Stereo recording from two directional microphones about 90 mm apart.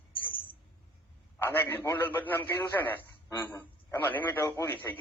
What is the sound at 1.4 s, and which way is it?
Speech, 25° left (ahead or behind).